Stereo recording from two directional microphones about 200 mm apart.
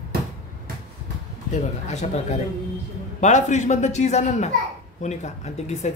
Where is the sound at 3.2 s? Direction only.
35° left (ahead or behind).